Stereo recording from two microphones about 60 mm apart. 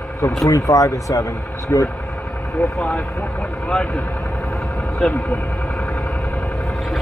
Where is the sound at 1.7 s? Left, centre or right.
Left.